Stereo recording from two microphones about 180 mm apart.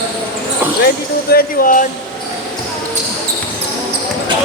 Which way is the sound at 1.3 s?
50° left (ahead or behind).